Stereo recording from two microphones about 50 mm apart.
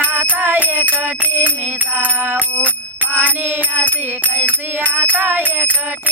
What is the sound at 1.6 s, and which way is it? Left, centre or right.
Music, right.